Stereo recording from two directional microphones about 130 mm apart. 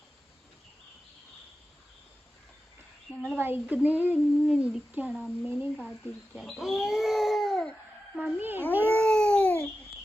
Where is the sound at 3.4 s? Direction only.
15° right (ahead or behind).